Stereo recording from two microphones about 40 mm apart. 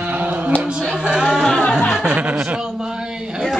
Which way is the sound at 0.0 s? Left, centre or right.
Right.